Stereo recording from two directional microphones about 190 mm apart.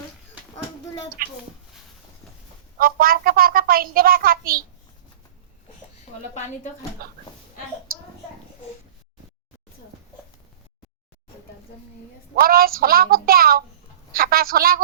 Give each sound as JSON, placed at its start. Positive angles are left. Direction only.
{"t": 1.2, "sound": "a child's voice", "side_deg": -50}
{"t": 2.7, "sound": "a child's voice", "side_deg": -50}
{"t": 12.4, "sound": "a child's voice", "side_deg": -50}